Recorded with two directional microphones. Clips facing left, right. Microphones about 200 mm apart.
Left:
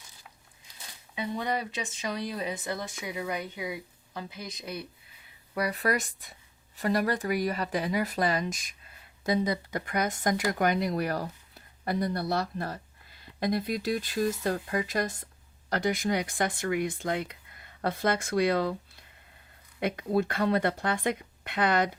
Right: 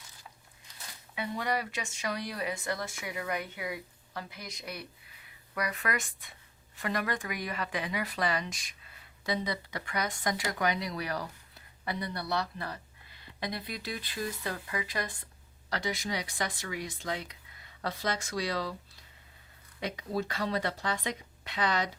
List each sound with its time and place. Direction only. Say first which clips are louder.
1.1 s speech: left 2 dB; 20° left (ahead or behind); by 18.8 s 55° left (ahead or behind)
19.8 s speech: left 6 dB; 55° left (ahead or behind)